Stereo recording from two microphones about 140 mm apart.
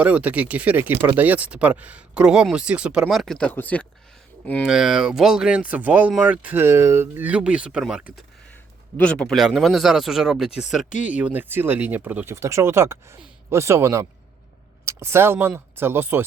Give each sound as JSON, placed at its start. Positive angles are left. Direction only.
{"t": 0.0, "sound": "speech", "side_deg": -10}
{"t": 4.6, "sound": "speech", "side_deg": -5}
{"t": 9.0, "sound": "speech", "side_deg": 10}